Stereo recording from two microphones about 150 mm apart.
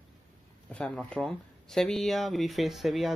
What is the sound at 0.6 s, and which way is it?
Speech, 10° left (ahead or behind).